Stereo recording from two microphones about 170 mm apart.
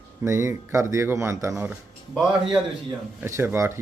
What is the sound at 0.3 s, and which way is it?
A man's voice, 15° right (ahead or behind).